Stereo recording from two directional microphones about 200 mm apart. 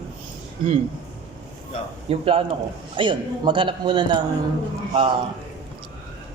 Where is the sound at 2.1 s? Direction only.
25° right (ahead or behind).